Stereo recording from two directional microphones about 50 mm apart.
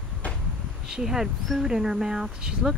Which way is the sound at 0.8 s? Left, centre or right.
Centre.